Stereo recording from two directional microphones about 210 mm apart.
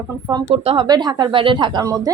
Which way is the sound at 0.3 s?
25° right (ahead or behind).